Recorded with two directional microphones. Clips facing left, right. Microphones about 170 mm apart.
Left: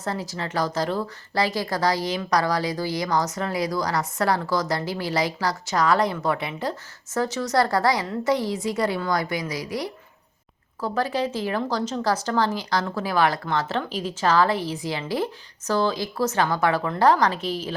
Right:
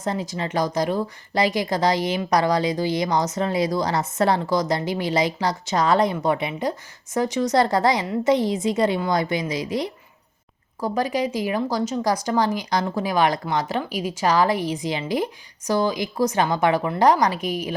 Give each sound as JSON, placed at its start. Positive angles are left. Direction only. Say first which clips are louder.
{"t": 0.0, "sound": "a woman's voice", "louder": "right 3 dB", "side_deg": -20}